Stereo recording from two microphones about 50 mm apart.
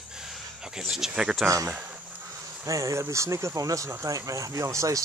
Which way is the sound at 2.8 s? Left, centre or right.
Right.